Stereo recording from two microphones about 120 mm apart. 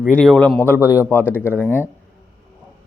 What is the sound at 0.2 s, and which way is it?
Speech, 10° left (ahead or behind).